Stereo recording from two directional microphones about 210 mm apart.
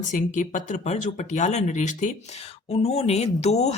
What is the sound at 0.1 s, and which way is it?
Speech, 35° left (ahead or behind).